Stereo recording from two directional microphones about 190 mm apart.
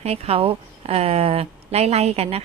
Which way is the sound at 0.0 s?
35° right (ahead or behind).